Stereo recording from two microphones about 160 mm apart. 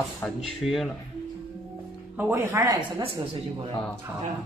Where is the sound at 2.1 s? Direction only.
15° right (ahead or behind).